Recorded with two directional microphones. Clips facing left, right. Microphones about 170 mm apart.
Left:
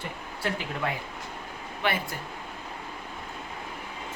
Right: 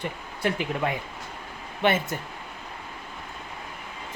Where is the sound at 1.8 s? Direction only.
20° right (ahead or behind).